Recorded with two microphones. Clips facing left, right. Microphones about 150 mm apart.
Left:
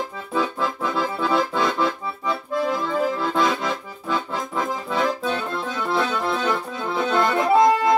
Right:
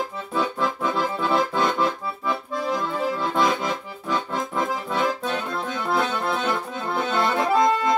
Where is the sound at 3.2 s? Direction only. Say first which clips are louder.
Left 1 dB; centre (ahead or behind).